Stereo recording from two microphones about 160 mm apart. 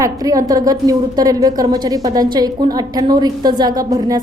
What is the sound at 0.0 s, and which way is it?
A woman's voice, 20° right (ahead or behind).